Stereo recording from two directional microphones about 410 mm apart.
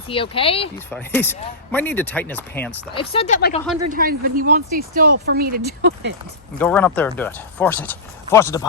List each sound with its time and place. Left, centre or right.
0.1 s speech: centre
3.8 s speech: right
6.6 s speech: centre